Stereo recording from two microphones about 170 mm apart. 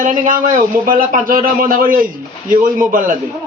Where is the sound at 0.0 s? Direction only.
50° right (ahead or behind).